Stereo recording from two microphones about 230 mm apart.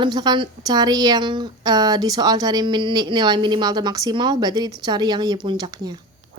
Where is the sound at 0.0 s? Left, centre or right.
Centre.